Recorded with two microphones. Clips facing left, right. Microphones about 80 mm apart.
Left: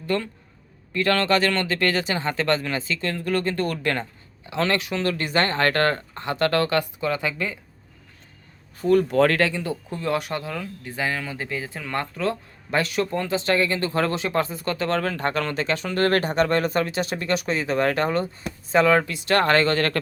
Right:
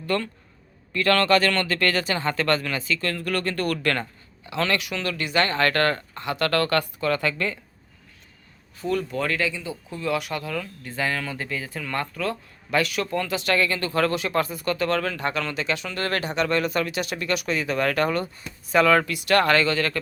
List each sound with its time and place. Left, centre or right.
0.1 s speech: centre
8.8 s speech: left
9.0 s speech: left
9.9 s speech: left
10.4 s speech: centre; by 20.0 s left